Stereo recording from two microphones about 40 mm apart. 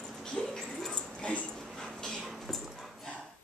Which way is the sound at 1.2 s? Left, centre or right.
Left.